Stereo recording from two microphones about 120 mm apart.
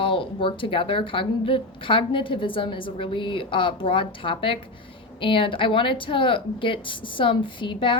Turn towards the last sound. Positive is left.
turn(degrees=45)  # may be behind; listen again after turning